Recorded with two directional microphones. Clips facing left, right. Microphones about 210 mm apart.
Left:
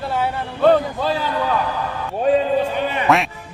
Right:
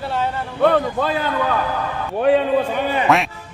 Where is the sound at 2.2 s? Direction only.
75° right (ahead or behind).